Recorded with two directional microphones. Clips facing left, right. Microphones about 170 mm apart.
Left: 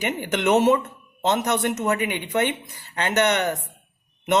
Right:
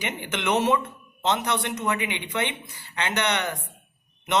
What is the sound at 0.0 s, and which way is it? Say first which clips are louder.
Speech: left 6 dB; 45° left (ahead or behind).